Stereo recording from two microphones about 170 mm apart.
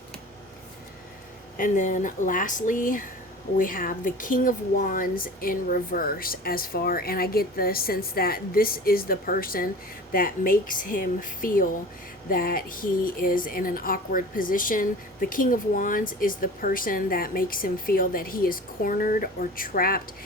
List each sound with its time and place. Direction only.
1.5 s a woman's voice: 50° left (ahead or behind)